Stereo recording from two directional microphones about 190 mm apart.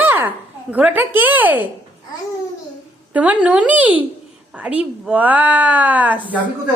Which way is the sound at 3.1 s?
5° right (ahead or behind).